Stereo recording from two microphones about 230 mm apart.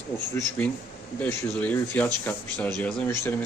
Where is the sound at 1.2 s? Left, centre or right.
Centre.